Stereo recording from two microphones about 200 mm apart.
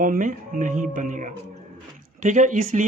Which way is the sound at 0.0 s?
40° right (ahead or behind).